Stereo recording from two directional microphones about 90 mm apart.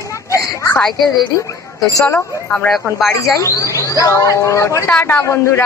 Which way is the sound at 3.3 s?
35° left (ahead or behind).